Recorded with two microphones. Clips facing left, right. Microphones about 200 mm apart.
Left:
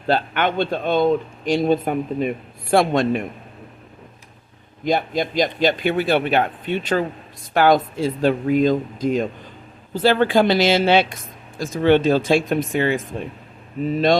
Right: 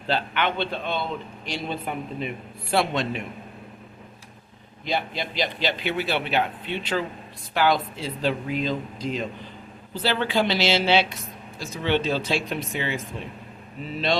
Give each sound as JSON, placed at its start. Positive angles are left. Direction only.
{"t": 0.1, "sound": "speech", "side_deg": 45}
{"t": 4.9, "sound": "speech", "side_deg": 45}